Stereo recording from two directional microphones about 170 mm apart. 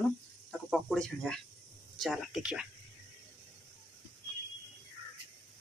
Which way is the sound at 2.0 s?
Centre (ahead or behind).